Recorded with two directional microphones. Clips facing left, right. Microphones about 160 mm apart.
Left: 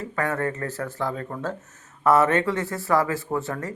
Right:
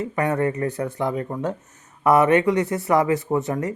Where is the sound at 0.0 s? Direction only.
20° right (ahead or behind).